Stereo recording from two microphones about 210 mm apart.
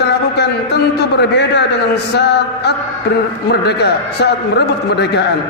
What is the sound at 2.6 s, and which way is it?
A man's voice, 50° left (ahead or behind).